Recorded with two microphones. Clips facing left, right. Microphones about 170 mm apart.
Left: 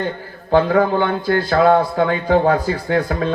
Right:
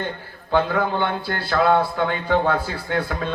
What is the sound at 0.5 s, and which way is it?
Speech, 45° left (ahead or behind).